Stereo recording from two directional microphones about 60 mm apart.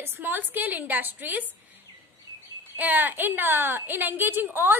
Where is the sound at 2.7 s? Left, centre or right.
Right.